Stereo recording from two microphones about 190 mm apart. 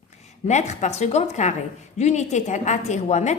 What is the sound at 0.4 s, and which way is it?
A woman's voice, 35° left (ahead or behind).